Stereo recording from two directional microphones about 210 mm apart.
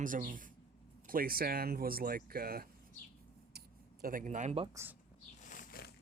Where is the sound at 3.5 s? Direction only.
45° right (ahead or behind).